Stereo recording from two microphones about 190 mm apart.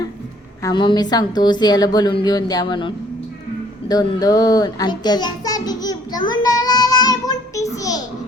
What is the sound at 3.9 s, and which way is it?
Child singing, 20° left (ahead or behind).